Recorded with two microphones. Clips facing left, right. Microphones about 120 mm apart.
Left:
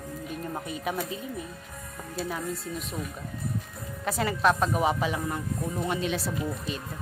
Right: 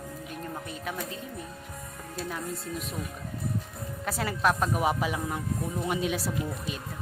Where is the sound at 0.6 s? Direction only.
15° left (ahead or behind).